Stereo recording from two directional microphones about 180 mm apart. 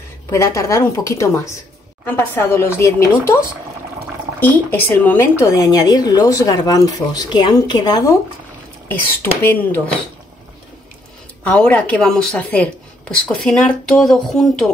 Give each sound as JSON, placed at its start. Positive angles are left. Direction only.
{"t": 0.3, "sound": "a woman's voice", "side_deg": 15}
{"t": 4.4, "sound": "speech", "side_deg": 10}
{"t": 8.8, "sound": "a woman's voice", "side_deg": 10}
{"t": 11.4, "sound": "a woman's voice", "side_deg": 10}